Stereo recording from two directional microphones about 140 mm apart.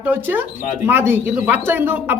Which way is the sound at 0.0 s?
15° right (ahead or behind).